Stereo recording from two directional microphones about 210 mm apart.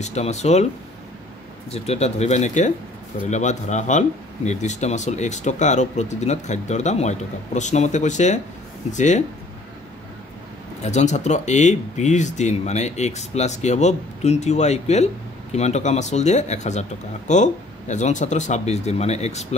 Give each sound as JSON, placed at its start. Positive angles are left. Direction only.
{"t": 0.0, "sound": "speech", "side_deg": 30}
{"t": 1.7, "sound": "speech", "side_deg": 30}
{"t": 10.8, "sound": "speech", "side_deg": 35}